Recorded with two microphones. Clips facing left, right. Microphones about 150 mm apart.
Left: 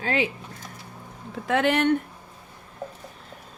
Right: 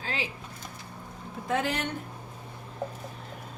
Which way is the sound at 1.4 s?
75° left (ahead or behind).